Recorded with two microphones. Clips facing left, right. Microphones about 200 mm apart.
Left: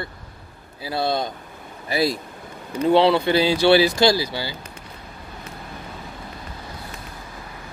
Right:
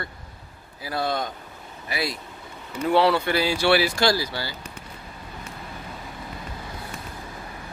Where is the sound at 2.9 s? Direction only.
20° left (ahead or behind).